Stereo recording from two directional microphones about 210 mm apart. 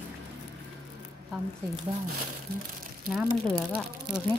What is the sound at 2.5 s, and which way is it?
Speech, 45° right (ahead or behind).